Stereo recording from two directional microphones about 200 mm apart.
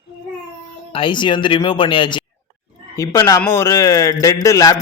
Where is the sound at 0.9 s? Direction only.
25° left (ahead or behind).